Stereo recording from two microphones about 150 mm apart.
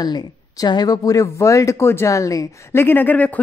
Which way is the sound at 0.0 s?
25° left (ahead or behind).